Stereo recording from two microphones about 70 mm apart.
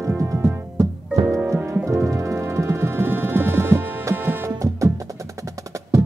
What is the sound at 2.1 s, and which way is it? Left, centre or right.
Music, right.